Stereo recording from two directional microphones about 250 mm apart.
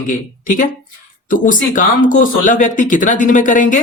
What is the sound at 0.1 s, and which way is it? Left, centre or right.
Speech, left.